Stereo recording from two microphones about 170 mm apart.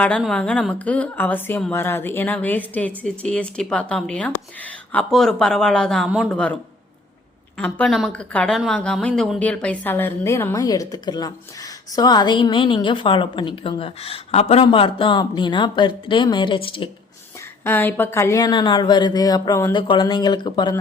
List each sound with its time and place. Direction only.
0.2 s a woman's voice: 5° left (ahead or behind)
7.6 s a woman's voice: 10° left (ahead or behind); by 16.9 s 30° left (ahead or behind)
17.6 s a woman's voice: 15° left (ahead or behind)